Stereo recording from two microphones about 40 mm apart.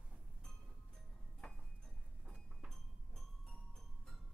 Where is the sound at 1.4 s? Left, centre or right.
Centre.